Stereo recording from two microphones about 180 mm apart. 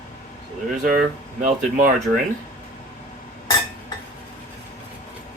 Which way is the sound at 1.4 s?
45° right (ahead or behind).